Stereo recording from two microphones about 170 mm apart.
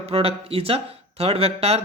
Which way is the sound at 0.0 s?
35° right (ahead or behind).